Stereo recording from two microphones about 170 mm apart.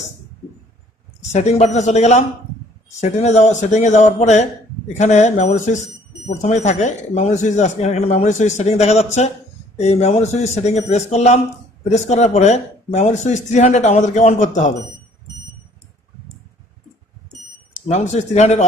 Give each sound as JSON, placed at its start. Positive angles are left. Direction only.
{"t": 1.3, "sound": "speech", "side_deg": 40}
{"t": 17.8, "sound": "speech", "side_deg": 40}